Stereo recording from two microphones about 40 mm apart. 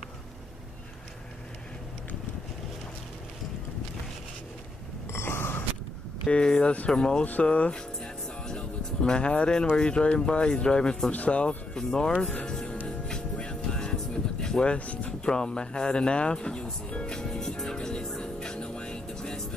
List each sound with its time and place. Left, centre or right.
5.2 s a sound: left
6.2 s speech: left
7.4 s speech: left
7.7 s music: centre
9.8 s speech: left
11.1 s speech: left
11.7 s speech: centre
12.8 s music: left
14.7 s speech: left
15.2 s speech: left
17.1 s music: centre